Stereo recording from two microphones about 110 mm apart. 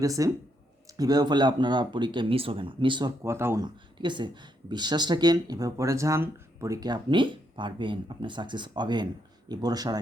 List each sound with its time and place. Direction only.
0.0 s speech: 30° right (ahead or behind); by 3.1 s 45° right (ahead or behind)
3.2 s speech: 25° right (ahead or behind)
3.6 s speech: 45° right (ahead or behind)